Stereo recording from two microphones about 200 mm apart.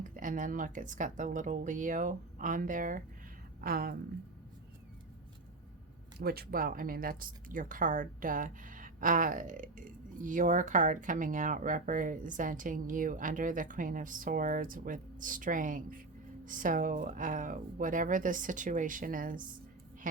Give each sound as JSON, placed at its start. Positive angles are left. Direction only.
{"t": 0.0, "sound": "a woman's voice", "side_deg": -40}
{"t": 6.1, "sound": "speech", "side_deg": -50}